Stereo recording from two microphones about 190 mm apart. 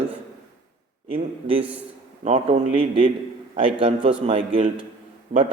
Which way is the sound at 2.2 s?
35° right (ahead or behind).